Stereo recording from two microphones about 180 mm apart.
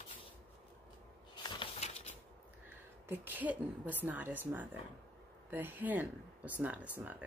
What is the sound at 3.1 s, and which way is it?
Speech, 10° right (ahead or behind).